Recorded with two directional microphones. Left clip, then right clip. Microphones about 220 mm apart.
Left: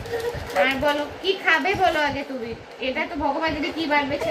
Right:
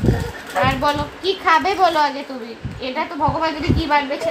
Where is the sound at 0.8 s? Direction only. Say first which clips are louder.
Right 3 dB; 25° right (ahead or behind).